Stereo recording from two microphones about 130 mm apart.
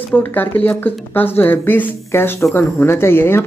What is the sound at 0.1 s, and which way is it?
Speech, 15° left (ahead or behind).